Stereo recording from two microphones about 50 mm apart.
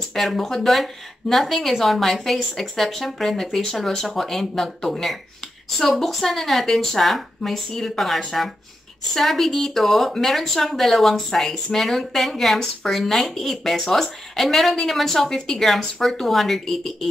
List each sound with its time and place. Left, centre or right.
0.1 s speech: centre